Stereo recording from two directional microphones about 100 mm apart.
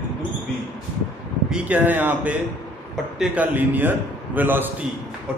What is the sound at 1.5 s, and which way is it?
A man's voice, 15° right (ahead or behind).